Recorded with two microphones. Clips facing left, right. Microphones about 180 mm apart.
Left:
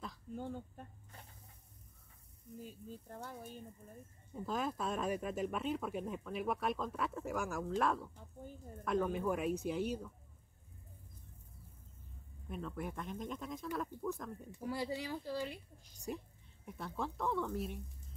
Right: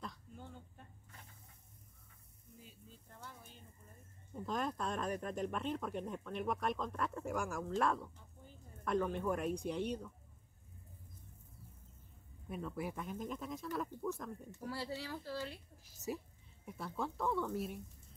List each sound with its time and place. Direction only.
0.3 s speech: 45° left (ahead or behind)
2.6 s speech: 45° left (ahead or behind)
4.3 s speech: centre (ahead or behind)
12.4 s speech: 5° right (ahead or behind)
14.5 s speech: 15° left (ahead or behind)
15.8 s speech: 5° right (ahead or behind)